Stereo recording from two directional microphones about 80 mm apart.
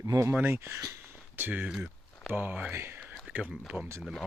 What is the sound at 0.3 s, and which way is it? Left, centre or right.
Speech, right.